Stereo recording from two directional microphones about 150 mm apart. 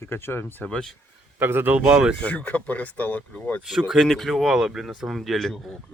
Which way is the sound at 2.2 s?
10° left (ahead or behind).